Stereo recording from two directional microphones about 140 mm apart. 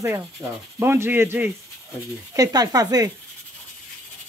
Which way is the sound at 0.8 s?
15° right (ahead or behind).